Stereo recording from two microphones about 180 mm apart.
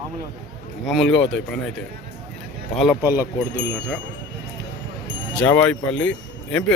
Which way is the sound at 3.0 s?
10° right (ahead or behind).